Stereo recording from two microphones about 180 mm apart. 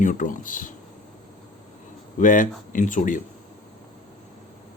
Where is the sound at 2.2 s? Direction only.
45° left (ahead or behind).